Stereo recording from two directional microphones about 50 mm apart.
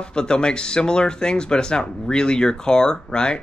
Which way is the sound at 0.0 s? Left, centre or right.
Centre.